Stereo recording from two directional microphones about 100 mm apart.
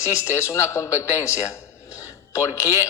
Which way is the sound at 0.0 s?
30° left (ahead or behind).